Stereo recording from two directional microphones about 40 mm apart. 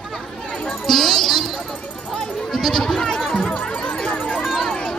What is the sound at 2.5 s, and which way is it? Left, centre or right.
Sheep, centre.